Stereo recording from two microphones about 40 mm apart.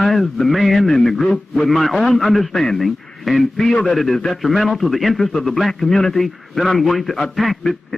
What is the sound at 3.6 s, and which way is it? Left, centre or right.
Speech, left.